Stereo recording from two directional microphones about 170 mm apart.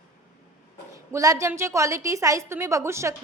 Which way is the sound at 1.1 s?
20° right (ahead or behind).